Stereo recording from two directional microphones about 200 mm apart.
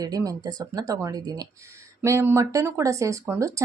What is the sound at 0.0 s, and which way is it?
Speech, 15° right (ahead or behind).